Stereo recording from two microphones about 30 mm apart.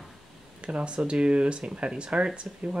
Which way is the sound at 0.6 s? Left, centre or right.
Right.